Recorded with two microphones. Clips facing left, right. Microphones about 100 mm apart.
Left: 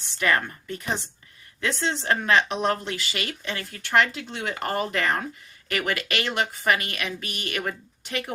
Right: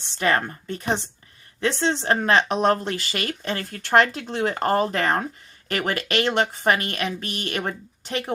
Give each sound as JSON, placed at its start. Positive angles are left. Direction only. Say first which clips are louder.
{"t": 0.2, "sound": "speech", "louder": "right 2 dB", "side_deg": -30}